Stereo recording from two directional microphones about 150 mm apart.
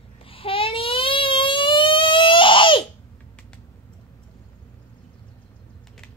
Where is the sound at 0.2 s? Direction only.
35° left (ahead or behind).